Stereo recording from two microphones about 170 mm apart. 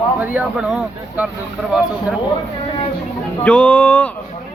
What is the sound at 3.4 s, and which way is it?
Speech, 10° left (ahead or behind).